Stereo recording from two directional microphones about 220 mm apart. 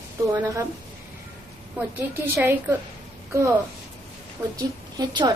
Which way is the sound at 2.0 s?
10° right (ahead or behind).